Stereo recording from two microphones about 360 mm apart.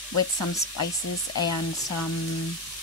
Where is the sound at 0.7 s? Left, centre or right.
Left.